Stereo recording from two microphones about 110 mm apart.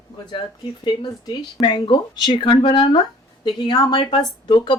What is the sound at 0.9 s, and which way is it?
A woman's voice, 40° left (ahead or behind).